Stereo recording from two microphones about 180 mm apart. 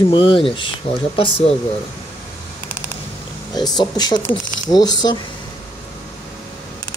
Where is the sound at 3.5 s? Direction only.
20° left (ahead or behind).